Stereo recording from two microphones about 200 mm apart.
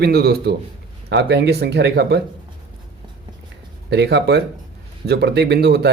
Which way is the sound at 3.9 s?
55° right (ahead or behind).